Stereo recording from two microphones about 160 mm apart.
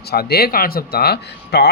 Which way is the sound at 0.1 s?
80° left.